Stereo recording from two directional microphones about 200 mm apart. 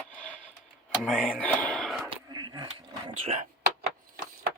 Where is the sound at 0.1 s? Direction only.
5° left (ahead or behind).